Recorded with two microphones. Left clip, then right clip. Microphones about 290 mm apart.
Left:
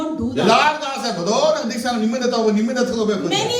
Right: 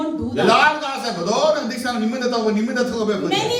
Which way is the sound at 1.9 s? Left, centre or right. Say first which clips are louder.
Left 2 dB; left.